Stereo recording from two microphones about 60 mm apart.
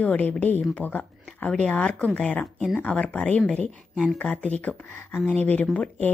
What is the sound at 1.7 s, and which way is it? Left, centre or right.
Speech, centre.